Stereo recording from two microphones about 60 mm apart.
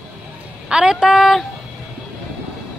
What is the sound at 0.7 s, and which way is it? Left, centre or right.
Speech, centre.